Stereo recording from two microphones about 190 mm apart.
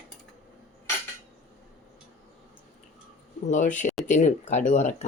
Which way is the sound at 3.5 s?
40° left (ahead or behind).